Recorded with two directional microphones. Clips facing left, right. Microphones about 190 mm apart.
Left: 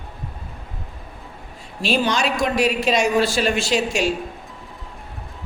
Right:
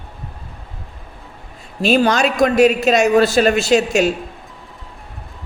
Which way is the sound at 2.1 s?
50° right (ahead or behind).